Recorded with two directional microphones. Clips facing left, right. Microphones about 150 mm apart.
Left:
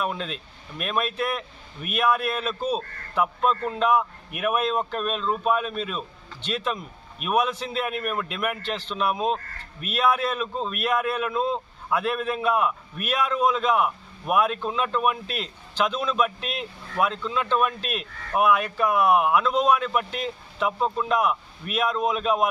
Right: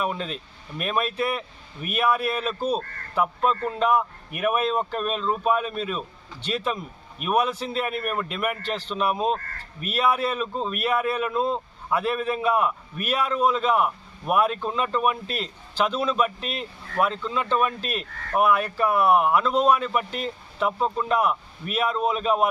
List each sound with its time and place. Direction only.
0.0 s a man's voice: centre (ahead or behind)